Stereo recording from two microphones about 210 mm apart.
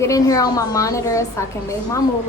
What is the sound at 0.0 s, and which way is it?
A woman's voice, 15° left (ahead or behind).